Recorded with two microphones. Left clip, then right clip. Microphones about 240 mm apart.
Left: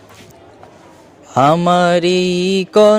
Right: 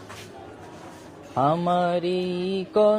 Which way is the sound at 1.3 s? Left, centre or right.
Left.